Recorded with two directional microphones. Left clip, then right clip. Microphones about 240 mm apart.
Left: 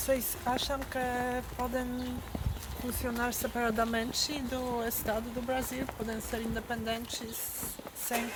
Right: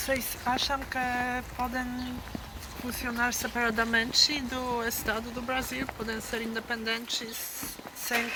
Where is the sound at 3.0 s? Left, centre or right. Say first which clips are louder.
Right 4 dB; left.